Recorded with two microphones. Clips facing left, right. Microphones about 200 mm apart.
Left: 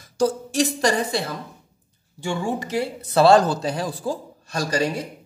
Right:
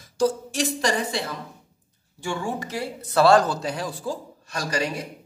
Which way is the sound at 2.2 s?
20° left (ahead or behind).